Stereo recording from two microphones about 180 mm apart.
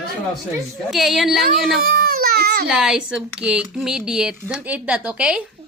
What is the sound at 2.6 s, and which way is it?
Speech, 5° right (ahead or behind).